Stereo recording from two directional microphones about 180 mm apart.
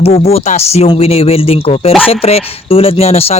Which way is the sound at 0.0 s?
35° left (ahead or behind).